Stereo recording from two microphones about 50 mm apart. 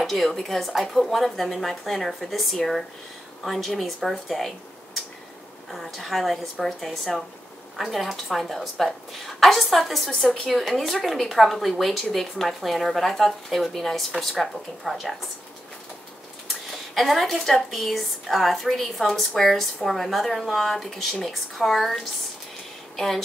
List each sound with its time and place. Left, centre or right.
0.0 s a woman's voice: centre
5.7 s a woman's voice: centre
16.9 s a woman's voice: centre